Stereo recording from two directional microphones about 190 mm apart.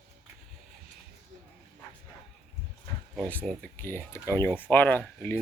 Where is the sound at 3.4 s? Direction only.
10° left (ahead or behind).